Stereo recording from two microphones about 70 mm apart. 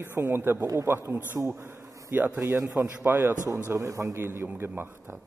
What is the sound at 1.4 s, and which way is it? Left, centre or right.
Bee, right.